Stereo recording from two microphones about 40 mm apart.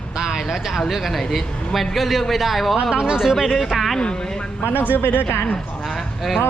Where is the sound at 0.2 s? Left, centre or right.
Centre.